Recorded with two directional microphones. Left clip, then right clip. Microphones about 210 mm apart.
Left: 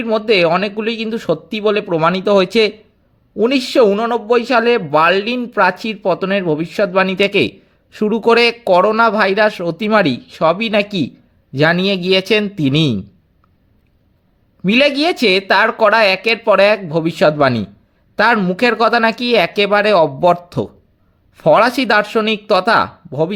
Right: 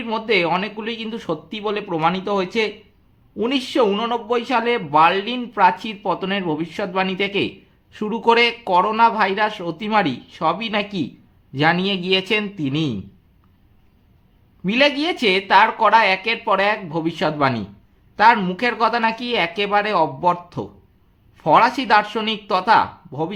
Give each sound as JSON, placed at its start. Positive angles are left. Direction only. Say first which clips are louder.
{"t": 0.0, "sound": "a man's voice", "louder": "left 6 dB", "side_deg": 30}
{"t": 14.6, "sound": "a man's voice", "louder": "left 5 dB", "side_deg": 35}